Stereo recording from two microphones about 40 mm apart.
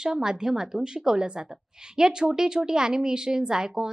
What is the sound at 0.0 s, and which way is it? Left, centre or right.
Speech, centre.